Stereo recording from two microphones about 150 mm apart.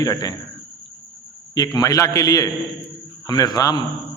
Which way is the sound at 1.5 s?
25° left (ahead or behind).